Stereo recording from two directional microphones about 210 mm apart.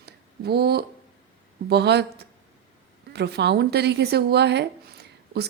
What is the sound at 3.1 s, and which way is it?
Speech, 50° right (ahead or behind).